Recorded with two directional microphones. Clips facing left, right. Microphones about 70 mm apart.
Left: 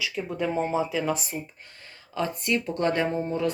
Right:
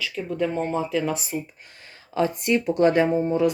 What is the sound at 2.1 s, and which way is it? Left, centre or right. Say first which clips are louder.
Speech: right 5 dB; centre.